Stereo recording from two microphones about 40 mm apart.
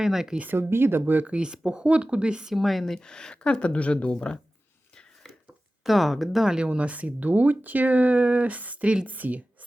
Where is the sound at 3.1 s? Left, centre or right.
Centre.